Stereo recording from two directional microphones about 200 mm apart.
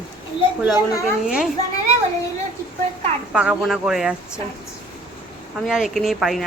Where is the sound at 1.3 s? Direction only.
5° right (ahead or behind).